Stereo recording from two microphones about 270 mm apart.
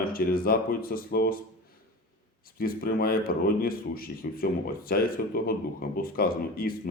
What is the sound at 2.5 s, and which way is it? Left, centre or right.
Speech, left.